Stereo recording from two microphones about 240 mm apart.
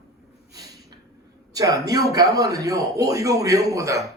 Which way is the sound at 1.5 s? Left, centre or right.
Centre.